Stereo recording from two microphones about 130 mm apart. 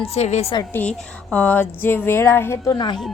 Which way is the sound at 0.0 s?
55° left (ahead or behind).